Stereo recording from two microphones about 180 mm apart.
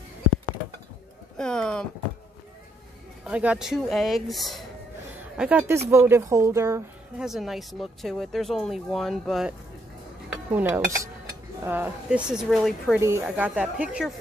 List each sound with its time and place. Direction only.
1.4 s speech: 5° left (ahead or behind)
3.3 s speech: 5° right (ahead or behind)
7.2 s speech: centre (ahead or behind)
10.3 s cutlery: 10° right (ahead or behind)
11.6 s speech: 10° right (ahead or behind)
13.0 s speech: 10° right (ahead or behind)